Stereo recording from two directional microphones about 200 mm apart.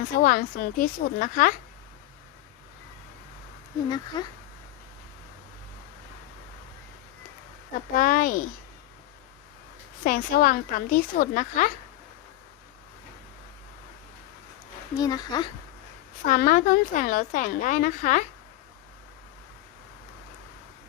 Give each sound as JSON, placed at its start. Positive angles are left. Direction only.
{"t": 0.2, "sound": "a woman's voice", "side_deg": 45}
{"t": 3.8, "sound": "speech", "side_deg": 20}
{"t": 7.9, "sound": "a woman's voice", "side_deg": 45}
{"t": 10.0, "sound": "a woman's voice", "side_deg": 45}
{"t": 14.9, "sound": "speech", "side_deg": 20}
{"t": 16.2, "sound": "a woman's voice", "side_deg": 40}